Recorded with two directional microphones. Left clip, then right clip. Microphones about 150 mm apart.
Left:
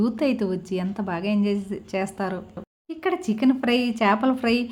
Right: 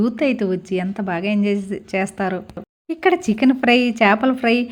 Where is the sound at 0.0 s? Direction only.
10° right (ahead or behind).